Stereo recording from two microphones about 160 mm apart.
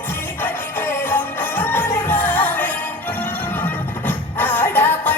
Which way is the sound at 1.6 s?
10° left (ahead or behind).